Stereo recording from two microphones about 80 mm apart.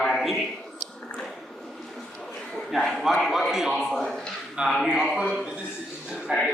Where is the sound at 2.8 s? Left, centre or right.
Centre.